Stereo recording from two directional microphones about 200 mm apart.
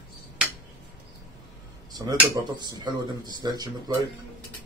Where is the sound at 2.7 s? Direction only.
20° right (ahead or behind).